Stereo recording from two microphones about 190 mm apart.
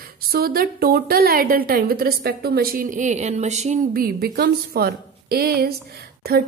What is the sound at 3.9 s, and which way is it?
A woman's voice, 55° right (ahead or behind).